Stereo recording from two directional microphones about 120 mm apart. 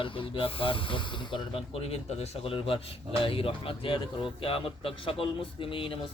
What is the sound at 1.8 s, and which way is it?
Speech, 60° left (ahead or behind).